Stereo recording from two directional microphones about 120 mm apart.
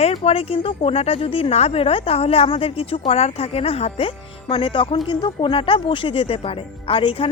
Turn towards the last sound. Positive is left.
turn(degrees=50)  # may be behind; listen again after turning